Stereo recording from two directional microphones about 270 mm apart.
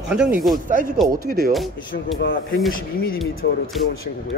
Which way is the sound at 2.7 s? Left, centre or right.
Left.